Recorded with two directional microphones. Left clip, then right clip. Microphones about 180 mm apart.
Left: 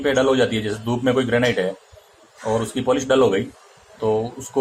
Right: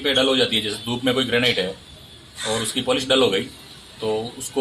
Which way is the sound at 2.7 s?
15° left (ahead or behind).